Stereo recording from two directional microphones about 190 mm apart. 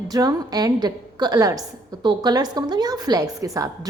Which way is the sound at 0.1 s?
20° right (ahead or behind).